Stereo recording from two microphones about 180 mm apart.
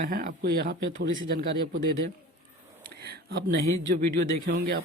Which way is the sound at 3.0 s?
60° right (ahead or behind).